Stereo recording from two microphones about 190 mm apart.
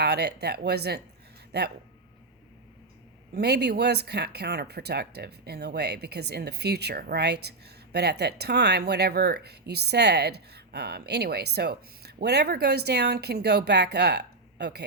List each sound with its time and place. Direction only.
0.0 s speech: 60° right (ahead or behind)
3.3 s speech: 60° right (ahead or behind)